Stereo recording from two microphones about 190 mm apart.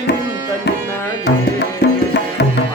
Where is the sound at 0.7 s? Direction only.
60° left (ahead or behind).